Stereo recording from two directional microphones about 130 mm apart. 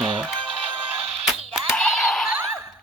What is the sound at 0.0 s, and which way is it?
Music, centre (ahead or behind).